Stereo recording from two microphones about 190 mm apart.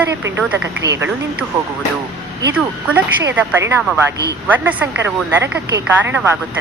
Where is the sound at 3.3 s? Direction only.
10° right (ahead or behind).